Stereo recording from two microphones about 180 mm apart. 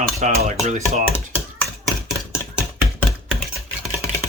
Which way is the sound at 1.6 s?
Centre (ahead or behind).